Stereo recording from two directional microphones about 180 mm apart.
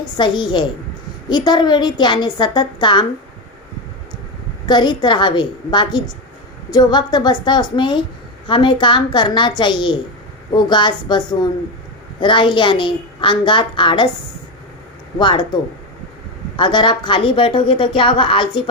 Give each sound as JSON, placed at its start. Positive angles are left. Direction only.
{"t": 0.0, "sound": "a woman's voice", "side_deg": 25}
{"t": 4.6, "sound": "a woman's voice", "side_deg": 25}
{"t": 15.2, "sound": "a woman's voice", "side_deg": 25}
{"t": 16.6, "sound": "a woman's voice", "side_deg": 25}